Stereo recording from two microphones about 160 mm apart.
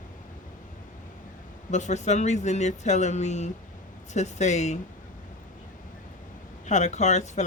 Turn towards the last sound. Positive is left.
turn(degrees=45)  # may be behind; listen again after turning